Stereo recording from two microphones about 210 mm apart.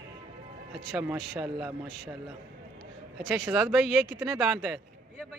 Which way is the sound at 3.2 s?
10° right (ahead or behind).